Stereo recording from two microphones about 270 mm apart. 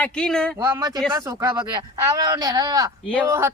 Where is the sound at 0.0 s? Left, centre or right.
Centre.